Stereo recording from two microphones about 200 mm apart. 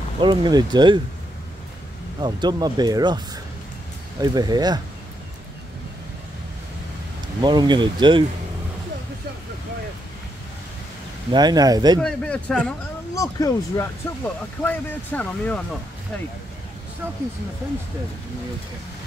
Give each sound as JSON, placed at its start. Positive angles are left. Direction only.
{"t": 0.2, "sound": "speech", "side_deg": -25}
{"t": 2.1, "sound": "speech", "side_deg": -20}
{"t": 4.2, "sound": "speech", "side_deg": -20}
{"t": 7.4, "sound": "speech", "side_deg": -20}
{"t": 11.3, "sound": "speech", "side_deg": -20}
{"t": 12.0, "sound": "speech", "side_deg": 5}
{"t": 13.1, "sound": "speech", "side_deg": 15}
{"t": 17.0, "sound": "speech", "side_deg": -10}